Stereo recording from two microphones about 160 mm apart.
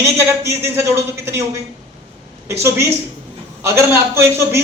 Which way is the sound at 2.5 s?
15° right (ahead or behind).